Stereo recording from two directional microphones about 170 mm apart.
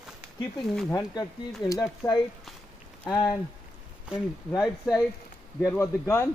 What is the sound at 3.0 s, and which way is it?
Speech, 5° left (ahead or behind).